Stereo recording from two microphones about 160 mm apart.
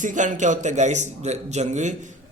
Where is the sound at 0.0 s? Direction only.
50° right (ahead or behind).